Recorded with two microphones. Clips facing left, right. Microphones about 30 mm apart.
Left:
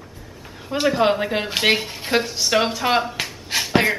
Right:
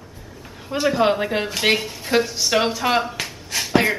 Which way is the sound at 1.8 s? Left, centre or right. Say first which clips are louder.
Even; left.